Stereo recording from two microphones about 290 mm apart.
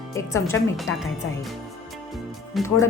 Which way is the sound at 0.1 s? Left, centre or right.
Centre.